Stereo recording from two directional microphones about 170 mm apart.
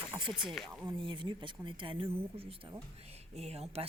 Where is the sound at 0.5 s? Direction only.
Centre (ahead or behind).